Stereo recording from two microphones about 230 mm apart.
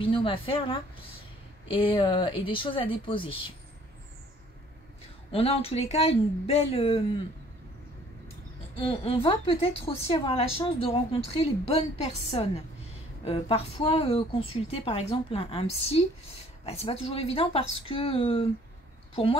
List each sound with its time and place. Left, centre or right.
0.0 s a woman's voice: left
5.3 s a woman's voice: left
8.7 s a woman's voice: left